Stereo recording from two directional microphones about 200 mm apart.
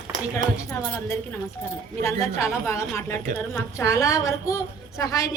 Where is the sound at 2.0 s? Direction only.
15° left (ahead or behind).